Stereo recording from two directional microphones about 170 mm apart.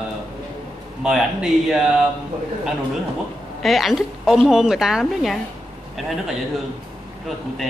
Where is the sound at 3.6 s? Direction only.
Centre (ahead or behind).